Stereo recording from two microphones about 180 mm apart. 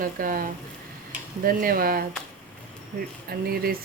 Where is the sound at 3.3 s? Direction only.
60° right (ahead or behind).